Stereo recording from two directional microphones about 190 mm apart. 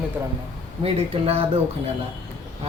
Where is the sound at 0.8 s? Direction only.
30° right (ahead or behind).